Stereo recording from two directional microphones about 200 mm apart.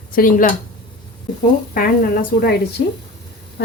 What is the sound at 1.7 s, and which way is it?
Speech, 50° left (ahead or behind).